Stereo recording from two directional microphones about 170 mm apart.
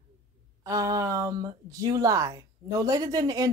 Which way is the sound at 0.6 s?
20° right (ahead or behind).